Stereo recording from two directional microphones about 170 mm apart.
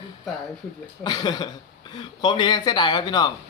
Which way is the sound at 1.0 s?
25° left (ahead or behind).